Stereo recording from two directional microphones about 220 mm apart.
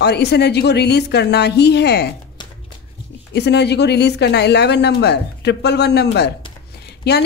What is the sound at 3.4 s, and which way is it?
Speech, 50° left (ahead or behind).